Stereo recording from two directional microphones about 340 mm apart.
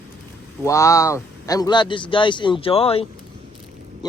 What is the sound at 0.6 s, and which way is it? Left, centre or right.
Speech, centre.